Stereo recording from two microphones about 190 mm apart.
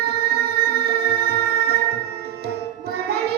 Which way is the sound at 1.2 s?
55° right (ahead or behind).